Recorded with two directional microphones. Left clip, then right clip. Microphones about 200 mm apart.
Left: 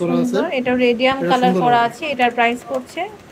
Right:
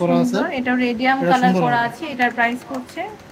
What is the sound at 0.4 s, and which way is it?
A woman's voice, 15° left (ahead or behind).